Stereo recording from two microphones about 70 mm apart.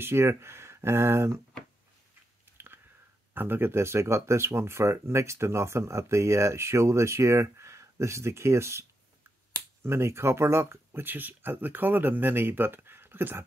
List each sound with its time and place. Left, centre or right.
0.0 s speech: right
2.5 s chewing: right
3.3 s speech: right
9.8 s speech: right